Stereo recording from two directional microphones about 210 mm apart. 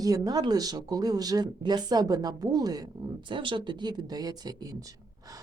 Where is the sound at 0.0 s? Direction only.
15° right (ahead or behind).